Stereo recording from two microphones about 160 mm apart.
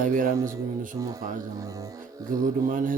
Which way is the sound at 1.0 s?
20° right (ahead or behind).